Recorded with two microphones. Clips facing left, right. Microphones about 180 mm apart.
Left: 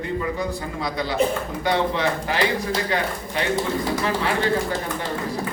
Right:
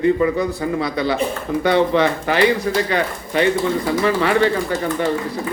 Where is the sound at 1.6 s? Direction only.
65° right (ahead or behind).